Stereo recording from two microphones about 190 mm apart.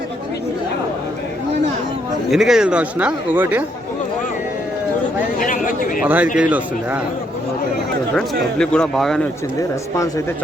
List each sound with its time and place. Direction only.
2.3 s speech: centre (ahead or behind)
5.4 s speech: 45° left (ahead or behind)
6.3 s a man's voice: 5° right (ahead or behind)
8.1 s speech: 5° left (ahead or behind)